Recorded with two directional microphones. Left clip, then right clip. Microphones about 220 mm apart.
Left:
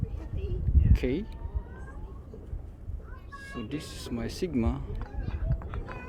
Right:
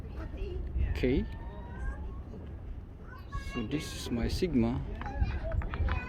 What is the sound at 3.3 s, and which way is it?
Speech, 5° right (ahead or behind).